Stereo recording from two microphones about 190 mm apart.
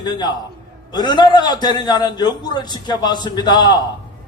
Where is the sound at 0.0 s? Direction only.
20° left (ahead or behind).